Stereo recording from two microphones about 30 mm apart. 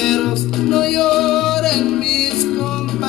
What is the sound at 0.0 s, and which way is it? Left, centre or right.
Music, centre.